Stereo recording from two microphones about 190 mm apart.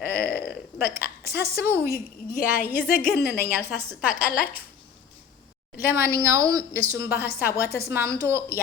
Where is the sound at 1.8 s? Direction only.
50° left (ahead or behind).